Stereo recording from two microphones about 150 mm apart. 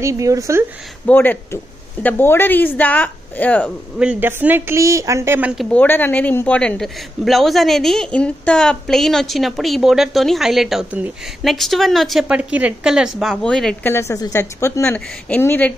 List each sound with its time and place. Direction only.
0.0 s speech: 20° right (ahead or behind)
1.0 s a woman's voice: 10° left (ahead or behind)
4.0 s speech: 10° right (ahead or behind)
5.6 s a woman's voice: 10° left (ahead or behind)
13.9 s a woman's voice: 20° left (ahead or behind)
14.9 s a woman's voice: 10° left (ahead or behind)